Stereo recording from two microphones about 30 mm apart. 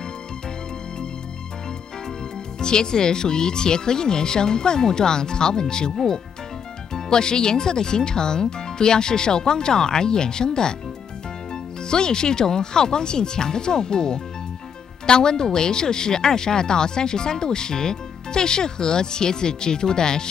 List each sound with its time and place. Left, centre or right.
2.6 s speech: left
11.9 s speech: left